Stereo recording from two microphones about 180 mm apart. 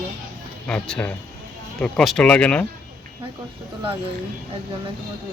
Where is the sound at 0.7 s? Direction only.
5° left (ahead or behind).